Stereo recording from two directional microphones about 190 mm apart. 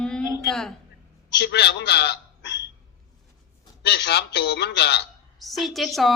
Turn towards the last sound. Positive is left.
turn(degrees=0)  # may be behind; listen again after turning